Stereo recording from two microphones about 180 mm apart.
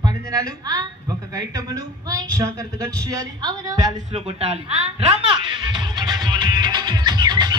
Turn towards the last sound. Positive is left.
turn(degrees=-25)  # may be behind; listen again after turning